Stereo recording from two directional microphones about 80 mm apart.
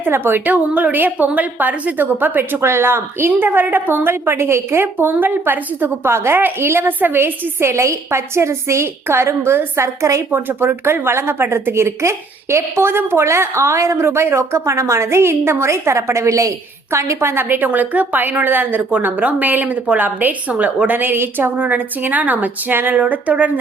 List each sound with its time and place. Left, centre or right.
0.0 s speech: right